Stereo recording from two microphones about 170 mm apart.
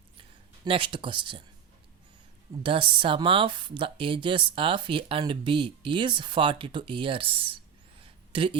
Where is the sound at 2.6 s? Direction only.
30° right (ahead or behind).